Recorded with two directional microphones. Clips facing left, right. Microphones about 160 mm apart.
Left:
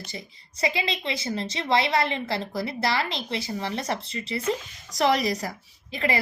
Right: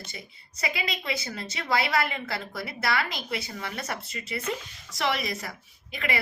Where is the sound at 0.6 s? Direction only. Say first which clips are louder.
Left 5 dB; 25° left (ahead or behind).